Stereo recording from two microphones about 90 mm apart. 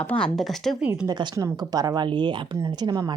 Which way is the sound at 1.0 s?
55° right (ahead or behind).